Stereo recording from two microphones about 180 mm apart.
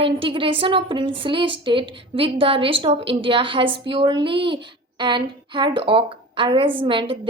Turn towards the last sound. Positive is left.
turn(degrees=-30)  # may be behind; listen again after turning